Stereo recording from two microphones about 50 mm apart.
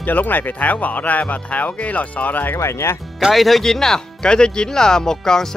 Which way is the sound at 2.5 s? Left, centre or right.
Left.